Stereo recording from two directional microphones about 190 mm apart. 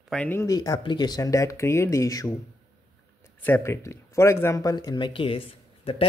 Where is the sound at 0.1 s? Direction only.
10° left (ahead or behind).